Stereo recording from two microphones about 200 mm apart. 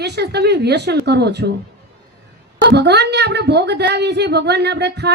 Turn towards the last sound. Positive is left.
turn(degrees=-55)  # may be behind; listen again after turning